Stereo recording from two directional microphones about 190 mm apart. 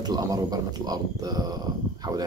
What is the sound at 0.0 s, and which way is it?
A man's voice, 20° right (ahead or behind).